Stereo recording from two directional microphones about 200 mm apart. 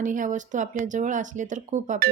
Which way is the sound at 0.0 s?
40° right (ahead or behind).